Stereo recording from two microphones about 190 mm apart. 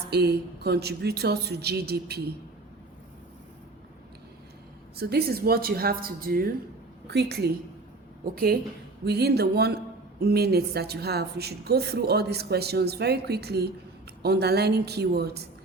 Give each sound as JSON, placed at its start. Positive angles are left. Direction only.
{"t": 0.1, "sound": "a woman's voice", "side_deg": -60}
{"t": 4.9, "sound": "a woman's voice", "side_deg": -55}